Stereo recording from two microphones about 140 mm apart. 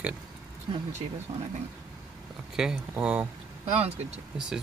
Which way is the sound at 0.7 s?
45° right (ahead or behind).